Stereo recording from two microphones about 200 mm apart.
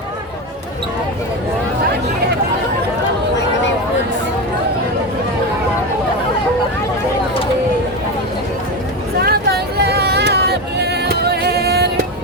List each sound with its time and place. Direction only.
9.2 s vehicle: 55° right (ahead or behind)